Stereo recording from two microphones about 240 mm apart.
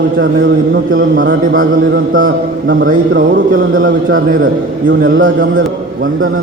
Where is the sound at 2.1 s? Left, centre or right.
Right.